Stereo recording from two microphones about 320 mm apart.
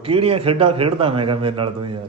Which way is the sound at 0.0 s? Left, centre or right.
Centre.